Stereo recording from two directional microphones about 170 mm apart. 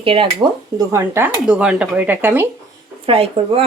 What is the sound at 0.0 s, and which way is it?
Speech, 30° right (ahead or behind).